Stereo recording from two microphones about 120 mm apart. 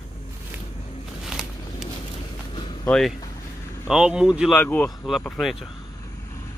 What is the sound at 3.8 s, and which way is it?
Speech, 5° right (ahead or behind).